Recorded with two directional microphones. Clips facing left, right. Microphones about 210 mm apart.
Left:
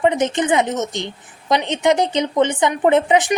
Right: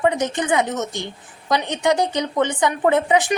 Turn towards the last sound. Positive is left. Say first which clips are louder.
# left 2 dB
turn(degrees=20)  # may be behind; listen again after turning